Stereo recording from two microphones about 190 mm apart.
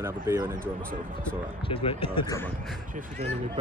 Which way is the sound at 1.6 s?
30° left (ahead or behind).